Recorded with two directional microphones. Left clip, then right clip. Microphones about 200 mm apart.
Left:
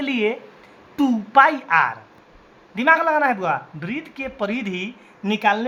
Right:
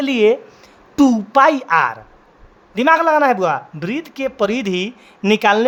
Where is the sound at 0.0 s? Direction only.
60° right (ahead or behind).